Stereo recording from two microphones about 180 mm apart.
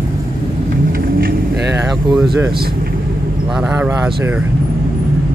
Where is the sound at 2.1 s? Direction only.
5° right (ahead or behind).